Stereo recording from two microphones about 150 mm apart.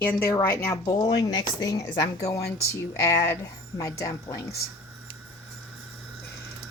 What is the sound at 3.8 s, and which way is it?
Speech, 20° left (ahead or behind).